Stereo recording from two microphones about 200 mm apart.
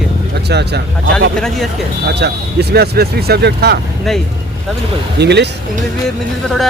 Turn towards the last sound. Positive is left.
turn(degrees=0)  # may be behind; listen again after turning